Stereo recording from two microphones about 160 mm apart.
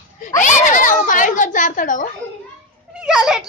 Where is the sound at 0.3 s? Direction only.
50° left (ahead or behind).